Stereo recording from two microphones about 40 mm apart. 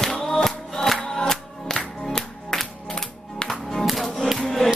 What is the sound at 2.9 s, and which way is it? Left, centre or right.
Music, centre.